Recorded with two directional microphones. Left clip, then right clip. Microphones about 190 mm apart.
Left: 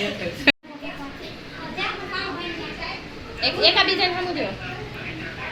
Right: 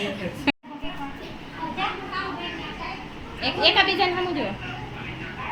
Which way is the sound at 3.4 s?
55° right (ahead or behind).